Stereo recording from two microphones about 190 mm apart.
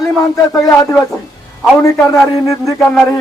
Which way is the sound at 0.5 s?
15° left (ahead or behind).